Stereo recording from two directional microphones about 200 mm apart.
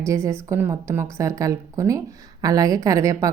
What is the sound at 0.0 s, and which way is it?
A woman's voice, 15° right (ahead or behind).